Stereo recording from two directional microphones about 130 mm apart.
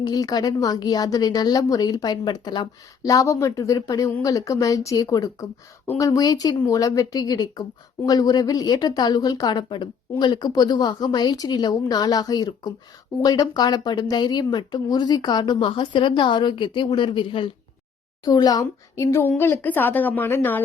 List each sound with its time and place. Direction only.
0.0 s a woman's voice: 30° left (ahead or behind); by 20.7 s 15° left (ahead or behind)